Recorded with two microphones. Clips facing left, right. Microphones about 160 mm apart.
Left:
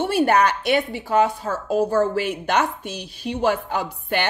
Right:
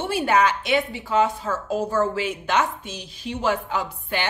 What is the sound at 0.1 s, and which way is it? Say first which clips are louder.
Speech: left 1 dB; 60° left (ahead or behind).